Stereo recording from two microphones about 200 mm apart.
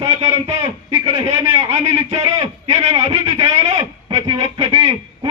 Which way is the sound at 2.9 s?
30° right (ahead or behind).